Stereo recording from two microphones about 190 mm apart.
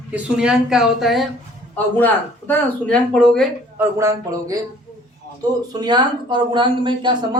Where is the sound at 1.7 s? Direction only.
10° left (ahead or behind).